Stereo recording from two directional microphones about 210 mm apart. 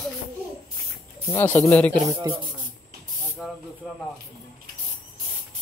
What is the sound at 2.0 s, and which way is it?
Speech, 15° right (ahead or behind).